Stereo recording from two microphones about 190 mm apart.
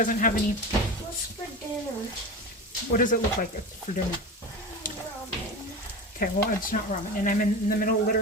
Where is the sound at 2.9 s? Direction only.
45° left (ahead or behind).